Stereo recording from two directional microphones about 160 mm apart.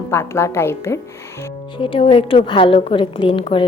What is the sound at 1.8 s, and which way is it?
A woman's voice, 35° left (ahead or behind).